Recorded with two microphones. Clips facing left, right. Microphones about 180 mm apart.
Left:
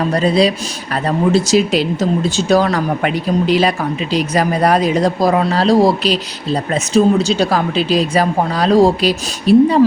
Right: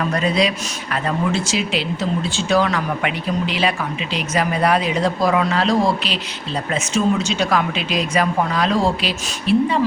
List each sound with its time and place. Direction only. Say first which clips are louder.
0.0 s speech: left 5 dB; 35° left (ahead or behind)